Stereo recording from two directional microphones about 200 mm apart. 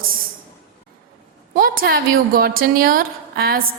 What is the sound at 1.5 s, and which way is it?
A woman's voice, 45° right (ahead or behind).